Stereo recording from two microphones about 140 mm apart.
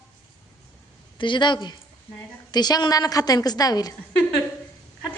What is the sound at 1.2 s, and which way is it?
A woman's voice, 35° left (ahead or behind).